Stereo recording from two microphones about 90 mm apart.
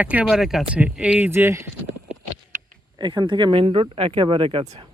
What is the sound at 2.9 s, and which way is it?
Speech, 55° right (ahead or behind).